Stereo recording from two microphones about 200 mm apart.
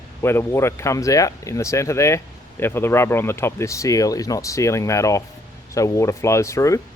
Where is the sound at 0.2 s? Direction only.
10° left (ahead or behind).